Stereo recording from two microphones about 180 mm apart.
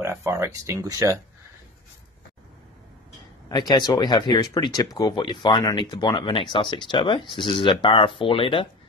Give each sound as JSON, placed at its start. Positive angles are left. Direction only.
{"t": 0.0, "sound": "speech", "side_deg": -15}
{"t": 3.4, "sound": "speech", "side_deg": 20}